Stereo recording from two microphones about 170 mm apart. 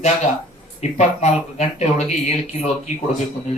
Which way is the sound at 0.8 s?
40° left (ahead or behind).